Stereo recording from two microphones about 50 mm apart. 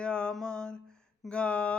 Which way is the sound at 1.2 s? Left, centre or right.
Left.